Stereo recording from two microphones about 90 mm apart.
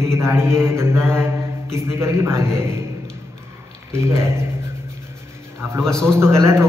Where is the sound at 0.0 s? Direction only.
30° right (ahead or behind).